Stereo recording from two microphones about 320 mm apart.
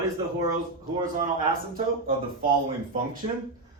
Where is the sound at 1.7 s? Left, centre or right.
Right.